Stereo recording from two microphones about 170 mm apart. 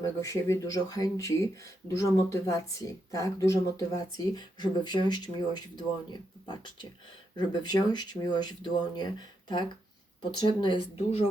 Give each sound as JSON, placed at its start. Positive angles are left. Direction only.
{"t": 0.0, "sound": "speech", "side_deg": 20}